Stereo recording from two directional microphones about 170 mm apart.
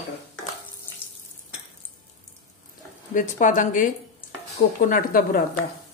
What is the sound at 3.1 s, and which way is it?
Speech, 50° left (ahead or behind).